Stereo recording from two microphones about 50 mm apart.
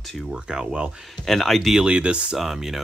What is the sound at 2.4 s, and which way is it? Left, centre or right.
Speech, centre.